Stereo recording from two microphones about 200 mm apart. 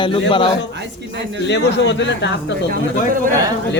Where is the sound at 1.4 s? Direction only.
60° left (ahead or behind).